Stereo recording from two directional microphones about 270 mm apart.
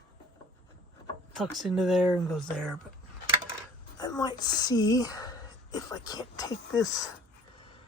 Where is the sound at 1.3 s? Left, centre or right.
Centre.